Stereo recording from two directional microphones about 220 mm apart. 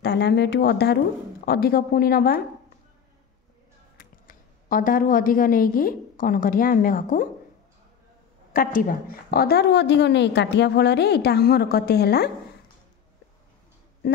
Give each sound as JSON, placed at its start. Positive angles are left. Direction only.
{"t": 0.0, "sound": "a woman's voice", "side_deg": 50}
{"t": 4.0, "sound": "a woman's voice", "side_deg": 40}
{"t": 8.5, "sound": "a woman's voice", "side_deg": 40}